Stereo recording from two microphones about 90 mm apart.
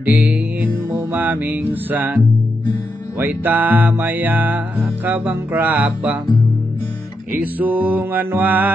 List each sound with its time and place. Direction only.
0.0 s music: 20° right (ahead or behind)
3.2 s music: 20° right (ahead or behind)
7.3 s music: 20° right (ahead or behind)